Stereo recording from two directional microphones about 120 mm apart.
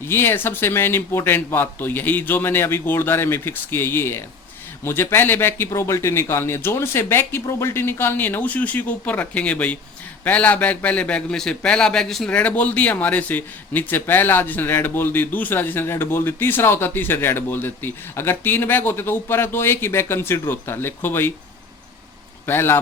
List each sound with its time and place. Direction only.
0.0 s a man's voice: 20° left (ahead or behind)
22.4 s speech: 20° left (ahead or behind)